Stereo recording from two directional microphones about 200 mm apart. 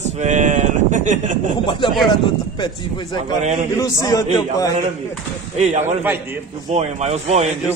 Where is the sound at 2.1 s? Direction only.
20° left (ahead or behind).